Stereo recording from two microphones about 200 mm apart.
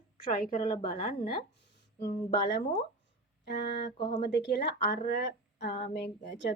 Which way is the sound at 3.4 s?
55° left (ahead or behind).